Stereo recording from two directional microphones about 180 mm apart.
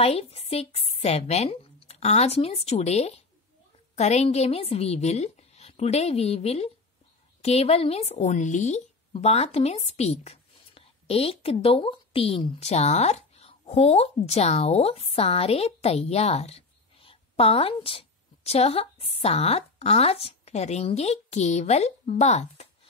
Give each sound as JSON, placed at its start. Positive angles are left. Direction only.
{"t": 0.0, "sound": "a woman's voice", "side_deg": 35}